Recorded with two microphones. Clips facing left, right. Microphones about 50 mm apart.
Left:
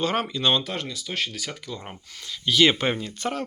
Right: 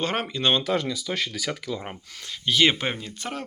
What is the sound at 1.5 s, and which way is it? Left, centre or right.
Speech, right.